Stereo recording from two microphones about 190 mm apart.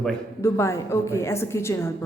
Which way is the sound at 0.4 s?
15° left (ahead or behind).